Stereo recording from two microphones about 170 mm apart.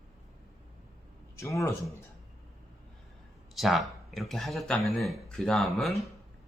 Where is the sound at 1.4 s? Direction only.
15° left (ahead or behind).